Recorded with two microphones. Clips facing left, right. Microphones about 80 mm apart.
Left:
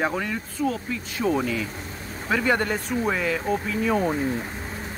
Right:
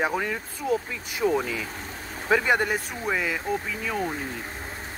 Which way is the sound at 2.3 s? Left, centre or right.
Centre.